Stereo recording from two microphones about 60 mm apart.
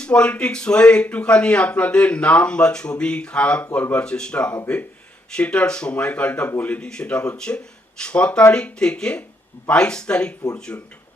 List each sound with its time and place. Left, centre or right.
0.0 s speech: centre